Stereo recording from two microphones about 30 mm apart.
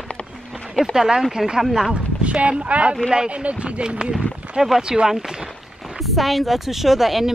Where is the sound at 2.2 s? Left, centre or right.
Right.